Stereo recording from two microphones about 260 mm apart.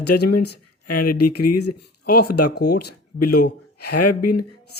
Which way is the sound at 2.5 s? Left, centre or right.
Left.